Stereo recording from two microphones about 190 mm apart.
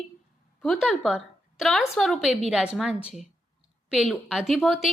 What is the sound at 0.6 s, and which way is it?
A woman's voice, centre (ahead or behind).